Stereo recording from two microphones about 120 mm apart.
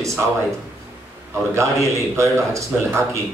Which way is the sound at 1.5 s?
25° right (ahead or behind).